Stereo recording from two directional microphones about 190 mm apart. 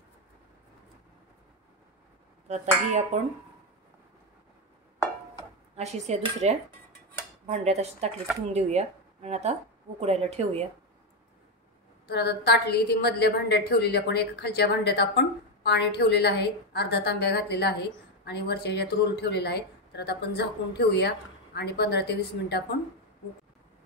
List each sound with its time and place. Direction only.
2.4 s speech: 35° right (ahead or behind)
5.8 s speech: 35° right (ahead or behind)
12.1 s a woman's voice: 60° left (ahead or behind)